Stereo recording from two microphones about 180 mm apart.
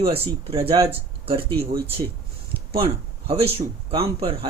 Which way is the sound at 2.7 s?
30° right (ahead or behind).